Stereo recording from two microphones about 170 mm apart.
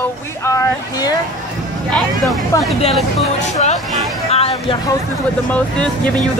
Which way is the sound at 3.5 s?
40° left (ahead or behind).